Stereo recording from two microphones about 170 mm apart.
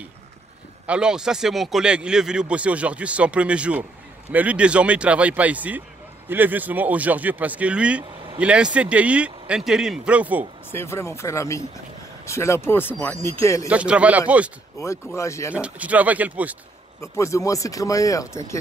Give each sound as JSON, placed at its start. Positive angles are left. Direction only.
{"t": 0.8, "sound": "speech", "side_deg": -5}
{"t": 10.7, "sound": "speech", "side_deg": 15}
{"t": 13.7, "sound": "speech", "side_deg": -5}
{"t": 14.8, "sound": "speech", "side_deg": 20}
{"t": 15.5, "sound": "speech", "side_deg": -10}
{"t": 17.0, "sound": "speech", "side_deg": 15}